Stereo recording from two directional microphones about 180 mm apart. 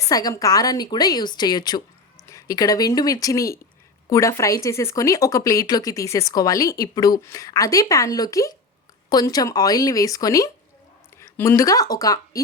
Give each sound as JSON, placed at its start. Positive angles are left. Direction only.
{"t": 0.1, "sound": "speech", "side_deg": 20}